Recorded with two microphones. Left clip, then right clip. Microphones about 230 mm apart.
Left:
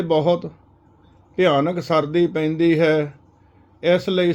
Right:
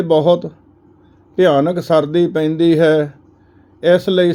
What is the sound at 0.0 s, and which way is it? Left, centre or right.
Speech, right.